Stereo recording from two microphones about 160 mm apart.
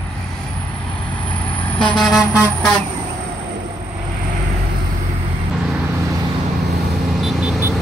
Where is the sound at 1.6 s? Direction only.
5° left (ahead or behind).